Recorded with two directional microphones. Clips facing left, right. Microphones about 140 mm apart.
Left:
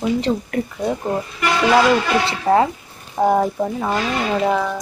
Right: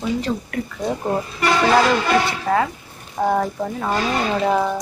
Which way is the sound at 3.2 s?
15° left (ahead or behind).